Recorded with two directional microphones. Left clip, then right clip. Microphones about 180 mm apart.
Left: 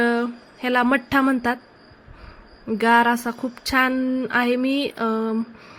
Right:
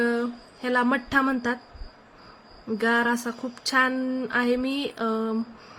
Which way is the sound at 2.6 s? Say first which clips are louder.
Left 6 dB; 25° left (ahead or behind).